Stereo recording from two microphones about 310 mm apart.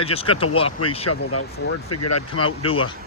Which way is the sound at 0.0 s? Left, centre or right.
Centre.